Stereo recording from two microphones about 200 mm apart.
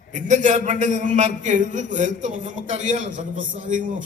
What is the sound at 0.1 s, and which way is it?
A man's voice, 40° right (ahead or behind).